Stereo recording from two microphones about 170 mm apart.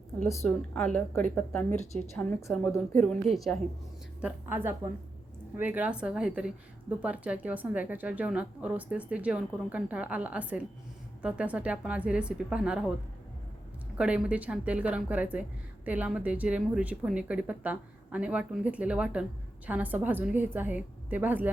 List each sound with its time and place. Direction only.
0.4 s speech: 5° left (ahead or behind)
1.7 s a woman's voice: 40° left (ahead or behind)
2.1 s a woman's voice: 10° left (ahead or behind)
4.2 s a woman's voice: 10° right (ahead or behind)
14.0 s a woman's voice: 5° right (ahead or behind)